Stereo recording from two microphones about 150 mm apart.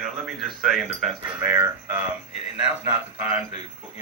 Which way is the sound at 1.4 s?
15° right (ahead or behind).